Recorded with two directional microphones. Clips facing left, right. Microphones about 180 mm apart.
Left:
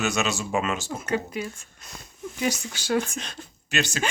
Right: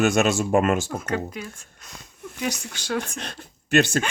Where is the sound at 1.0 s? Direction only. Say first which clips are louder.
Even; 5° left (ahead or behind).